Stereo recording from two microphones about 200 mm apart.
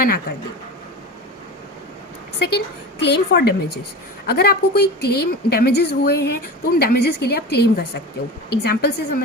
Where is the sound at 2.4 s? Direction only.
55° left (ahead or behind).